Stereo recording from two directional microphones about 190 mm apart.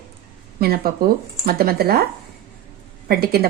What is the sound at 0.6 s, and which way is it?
A woman's voice, 55° right (ahead or behind).